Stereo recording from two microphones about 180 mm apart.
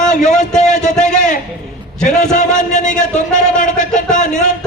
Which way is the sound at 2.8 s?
5° left (ahead or behind).